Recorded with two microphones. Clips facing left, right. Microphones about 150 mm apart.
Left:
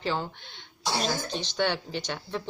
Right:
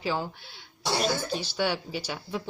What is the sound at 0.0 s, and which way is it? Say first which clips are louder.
Speech: even; 10° right (ahead or behind).